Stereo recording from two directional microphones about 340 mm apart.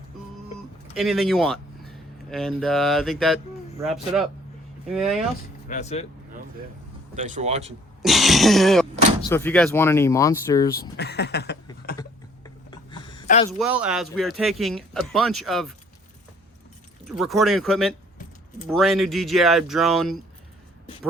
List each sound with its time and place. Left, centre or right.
0.9 s speech: centre
5.6 s speech: left
7.2 s speech: right
8.0 s speech: centre
10.9 s a sound: left
11.9 s a sound: centre
13.6 s speech: centre
17.1 s speech: centre